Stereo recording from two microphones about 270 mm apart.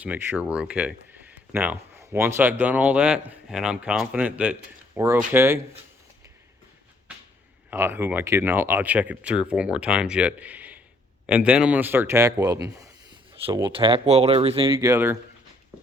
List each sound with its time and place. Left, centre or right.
0.0 s a man's voice: centre
7.7 s a man's voice: centre